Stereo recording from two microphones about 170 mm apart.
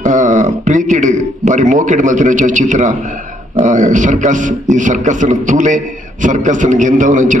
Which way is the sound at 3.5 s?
45° right (ahead or behind).